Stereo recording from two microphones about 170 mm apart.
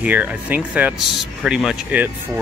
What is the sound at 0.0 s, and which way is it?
Speech, 10° right (ahead or behind).